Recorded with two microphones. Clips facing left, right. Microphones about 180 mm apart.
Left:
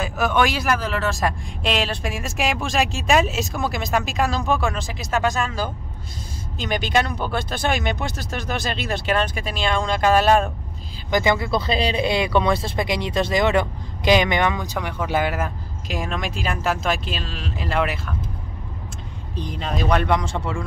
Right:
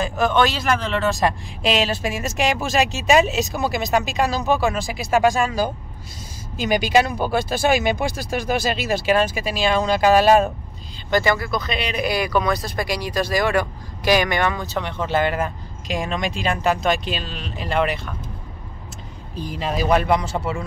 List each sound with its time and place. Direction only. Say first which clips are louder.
0.0 s speech: right 2 dB; 10° left (ahead or behind)
11.1 s speech: even; 15° left (ahead or behind)
19.3 s speech: right 2 dB; 5° right (ahead or behind)